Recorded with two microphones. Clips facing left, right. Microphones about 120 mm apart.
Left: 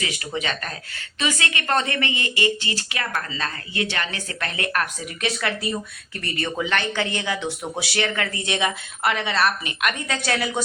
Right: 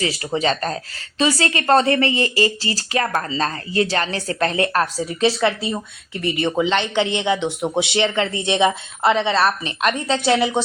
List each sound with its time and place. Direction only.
0.0 s speech: 35° right (ahead or behind)